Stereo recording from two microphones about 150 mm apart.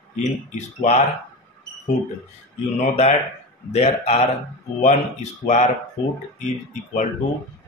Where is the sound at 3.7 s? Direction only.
45° left (ahead or behind).